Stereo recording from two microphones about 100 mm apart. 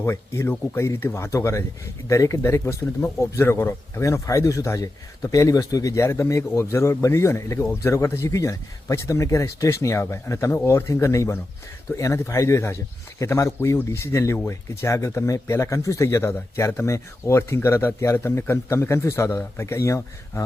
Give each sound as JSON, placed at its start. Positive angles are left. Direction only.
{"t": 0.0, "sound": "speech", "side_deg": 25}